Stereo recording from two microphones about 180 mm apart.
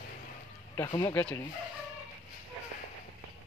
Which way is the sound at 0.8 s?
20° left (ahead or behind).